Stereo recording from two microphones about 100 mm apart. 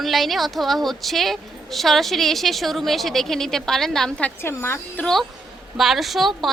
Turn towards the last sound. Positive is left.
turn(degrees=0)  # may be behind; listen again after turning